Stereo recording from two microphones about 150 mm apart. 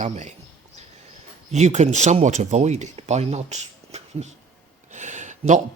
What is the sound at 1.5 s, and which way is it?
Speech, 50° right (ahead or behind).